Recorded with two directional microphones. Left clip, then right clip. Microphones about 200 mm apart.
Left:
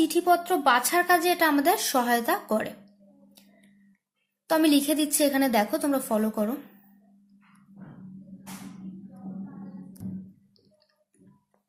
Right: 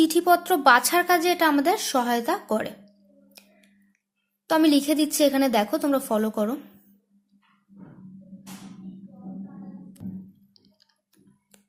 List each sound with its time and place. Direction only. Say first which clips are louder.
0.0 s speech: right 3 dB; 25° right (ahead or behind)
4.4 s speech: right 2 dB; 15° right (ahead or behind)